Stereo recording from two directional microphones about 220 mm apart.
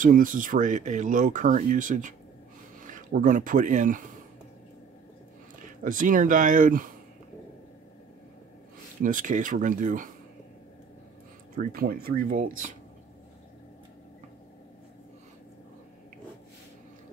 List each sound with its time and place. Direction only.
0.0 s speech: 40° right (ahead or behind)
5.9 s speech: 35° right (ahead or behind)
9.0 s speech: 35° right (ahead or behind)
11.5 s speech: 40° right (ahead or behind)